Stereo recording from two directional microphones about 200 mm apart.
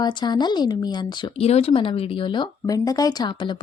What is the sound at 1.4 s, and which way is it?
Speech, 30° left (ahead or behind).